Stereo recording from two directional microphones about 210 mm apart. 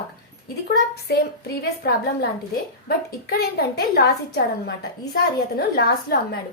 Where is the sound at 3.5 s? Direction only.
50° left (ahead or behind).